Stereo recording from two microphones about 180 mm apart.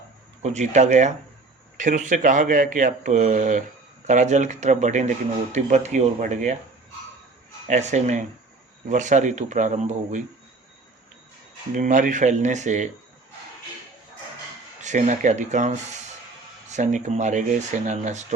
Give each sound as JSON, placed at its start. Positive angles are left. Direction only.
{"t": 0.4, "sound": "speech", "side_deg": -40}
{"t": 7.7, "sound": "speech", "side_deg": -40}
{"t": 11.7, "sound": "speech", "side_deg": -45}
{"t": 14.8, "sound": "speech", "side_deg": -40}